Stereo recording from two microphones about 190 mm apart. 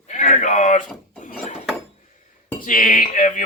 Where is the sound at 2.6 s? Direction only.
45° left (ahead or behind).